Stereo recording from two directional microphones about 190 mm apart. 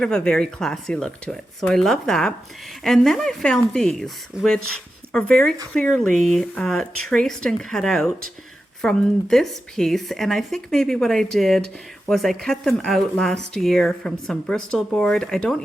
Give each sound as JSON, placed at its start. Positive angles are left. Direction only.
{"t": 0.0, "sound": "speech", "side_deg": 5}